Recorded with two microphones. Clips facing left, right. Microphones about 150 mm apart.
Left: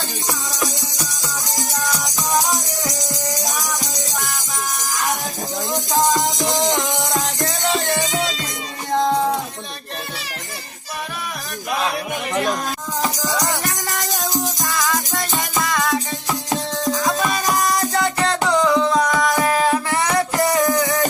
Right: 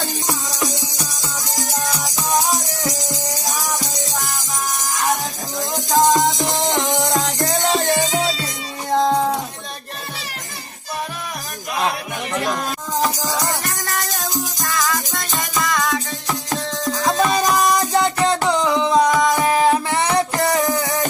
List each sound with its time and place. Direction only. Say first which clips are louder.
1.8 s music: even; 20° right (ahead or behind)
6.7 s music: right 2 dB; 45° right (ahead or behind)
13.4 s music: left 1 dB; 20° left (ahead or behind)
14.4 s music: even; centre (ahead or behind)
15.5 s music: even; 10° left (ahead or behind)
17.0 s music: right 3 dB; 20° right (ahead or behind)